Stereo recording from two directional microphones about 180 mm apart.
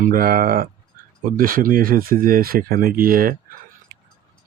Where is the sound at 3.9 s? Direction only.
55° right (ahead or behind).